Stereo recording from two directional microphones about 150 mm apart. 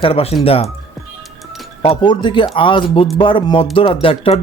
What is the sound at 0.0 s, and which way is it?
Speech, 40° left (ahead or behind).